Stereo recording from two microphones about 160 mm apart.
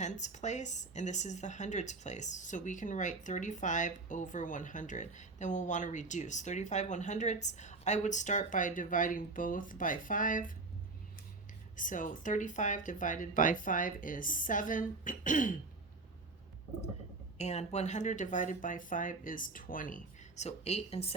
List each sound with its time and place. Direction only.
0.0 s speech: 50° left (ahead or behind)
11.8 s speech: 55° left (ahead or behind)
17.3 s speech: 45° left (ahead or behind)